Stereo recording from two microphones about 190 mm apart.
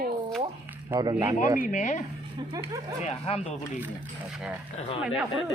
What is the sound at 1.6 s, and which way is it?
Speech, 45° left (ahead or behind).